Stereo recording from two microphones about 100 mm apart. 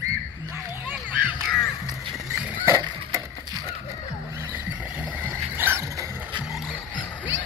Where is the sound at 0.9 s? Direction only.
15° right (ahead or behind).